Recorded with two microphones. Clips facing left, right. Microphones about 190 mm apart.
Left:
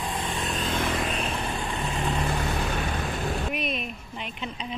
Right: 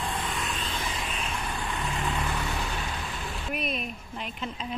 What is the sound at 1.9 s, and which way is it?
Vehicle, 35° left (ahead or behind).